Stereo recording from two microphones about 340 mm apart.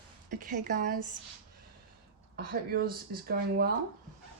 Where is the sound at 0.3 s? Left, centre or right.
Right.